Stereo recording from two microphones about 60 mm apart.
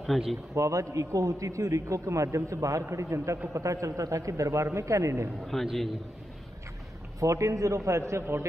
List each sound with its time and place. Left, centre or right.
0.0 s speech: centre
0.6 s a man's voice: right
5.5 s a man's voice: centre
7.2 s a man's voice: right